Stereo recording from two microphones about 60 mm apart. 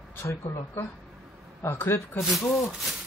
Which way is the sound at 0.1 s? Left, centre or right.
Left.